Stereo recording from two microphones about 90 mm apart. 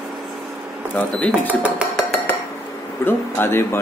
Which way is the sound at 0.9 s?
15° left (ahead or behind).